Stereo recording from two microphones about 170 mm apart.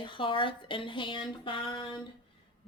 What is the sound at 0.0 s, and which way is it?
Speech, 30° left (ahead or behind).